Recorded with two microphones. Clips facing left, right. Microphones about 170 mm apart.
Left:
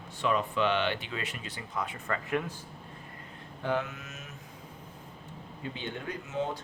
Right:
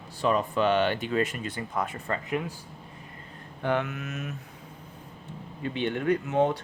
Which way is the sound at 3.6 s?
65° right (ahead or behind).